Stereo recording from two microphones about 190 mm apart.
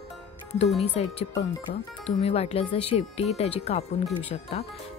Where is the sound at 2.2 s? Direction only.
30° left (ahead or behind).